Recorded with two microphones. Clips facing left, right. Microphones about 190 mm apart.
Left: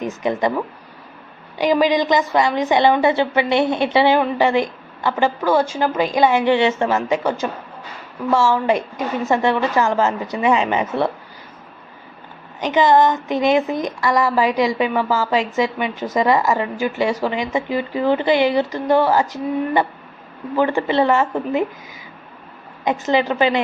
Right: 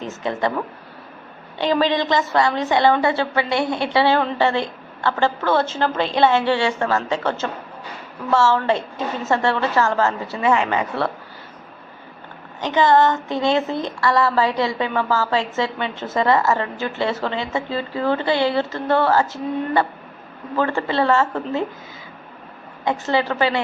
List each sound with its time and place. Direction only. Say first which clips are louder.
0.0 s a woman's voice: left 3 dB; 15° left (ahead or behind)
12.5 s a woman's voice: left 2 dB; 20° left (ahead or behind)
22.8 s a woman's voice: left 2 dB; 15° left (ahead or behind)